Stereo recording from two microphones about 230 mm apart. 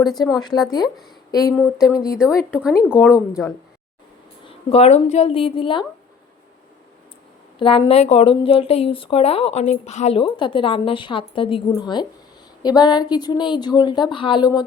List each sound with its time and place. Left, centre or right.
0.0 s speech: centre
0.3 s speech: centre
1.5 s speech: centre
4.4 s speech: left
7.6 s speech: left